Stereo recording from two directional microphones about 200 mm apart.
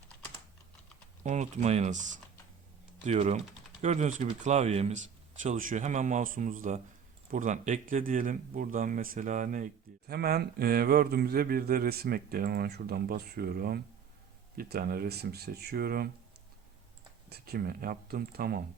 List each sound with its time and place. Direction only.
1.2 s speech: 35° right (ahead or behind)
10.1 s speech: 50° right (ahead or behind)
17.2 s speech: 50° right (ahead or behind)